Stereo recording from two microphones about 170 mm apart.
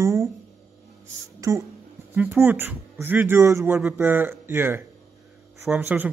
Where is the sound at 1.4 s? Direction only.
20° right (ahead or behind).